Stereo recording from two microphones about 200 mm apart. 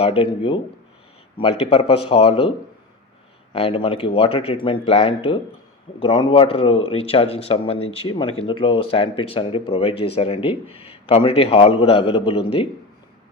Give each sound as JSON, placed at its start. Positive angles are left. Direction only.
{"t": 0.0, "sound": "speech", "side_deg": 25}
{"t": 3.5, "sound": "speech", "side_deg": 30}